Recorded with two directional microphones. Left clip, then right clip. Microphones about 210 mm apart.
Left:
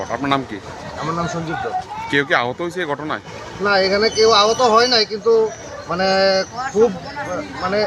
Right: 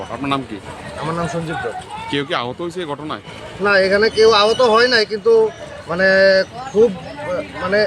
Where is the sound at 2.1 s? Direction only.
5° right (ahead or behind).